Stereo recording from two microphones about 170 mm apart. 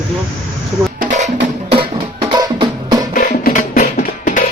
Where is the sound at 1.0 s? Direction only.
45° right (ahead or behind).